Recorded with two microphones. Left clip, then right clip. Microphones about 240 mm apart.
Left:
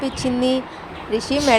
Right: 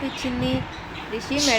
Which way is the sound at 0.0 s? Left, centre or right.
Centre.